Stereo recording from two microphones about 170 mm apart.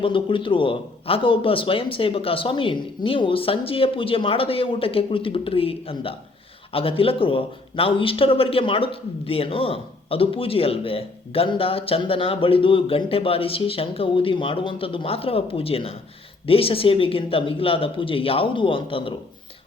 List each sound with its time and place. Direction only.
0.0 s speech: 30° left (ahead or behind)